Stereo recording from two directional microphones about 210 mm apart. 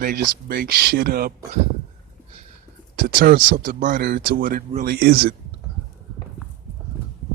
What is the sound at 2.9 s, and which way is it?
Speech, 45° right (ahead or behind).